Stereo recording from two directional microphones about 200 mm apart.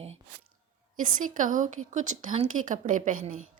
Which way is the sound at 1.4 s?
40° right (ahead or behind).